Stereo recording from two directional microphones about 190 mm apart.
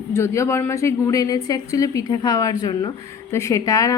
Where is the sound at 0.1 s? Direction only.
15° left (ahead or behind).